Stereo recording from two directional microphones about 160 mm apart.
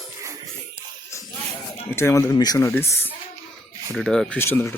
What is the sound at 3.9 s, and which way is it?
Speech, 5° left (ahead or behind).